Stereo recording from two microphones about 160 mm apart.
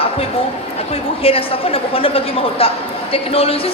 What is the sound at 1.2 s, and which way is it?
A woman's voice, 35° left (ahead or behind).